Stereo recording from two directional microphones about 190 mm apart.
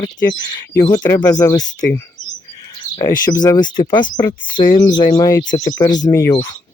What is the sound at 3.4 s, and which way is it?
Speech, 20° left (ahead or behind).